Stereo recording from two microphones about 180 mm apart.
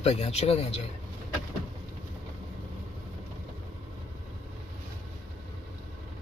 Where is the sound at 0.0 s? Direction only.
35° left (ahead or behind).